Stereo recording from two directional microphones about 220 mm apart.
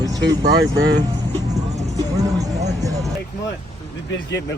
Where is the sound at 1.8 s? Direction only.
15° right (ahead or behind).